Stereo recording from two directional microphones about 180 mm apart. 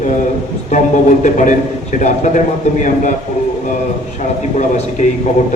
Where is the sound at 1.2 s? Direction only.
45° left (ahead or behind).